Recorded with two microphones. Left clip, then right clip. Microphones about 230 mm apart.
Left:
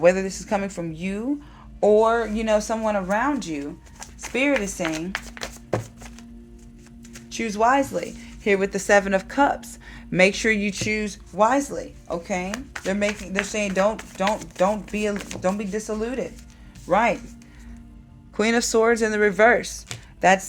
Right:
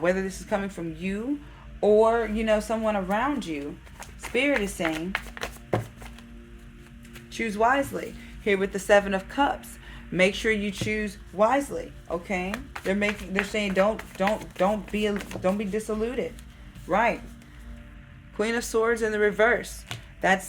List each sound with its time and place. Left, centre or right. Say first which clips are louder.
0.0 s speech: left 7 dB; left
4.8 s music: left 1 dB; centre
7.1 s speech: left 2 dB; left
12.5 s speech: left 2 dB; centre
13.1 s speech: left 2 dB; centre
15.1 s speech: left 2 dB; centre
16.9 s speech: left 4 dB; left
18.3 s speech: left 5 dB; left